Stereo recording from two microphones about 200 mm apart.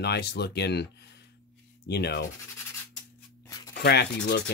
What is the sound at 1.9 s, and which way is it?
Rub, 55° left (ahead or behind).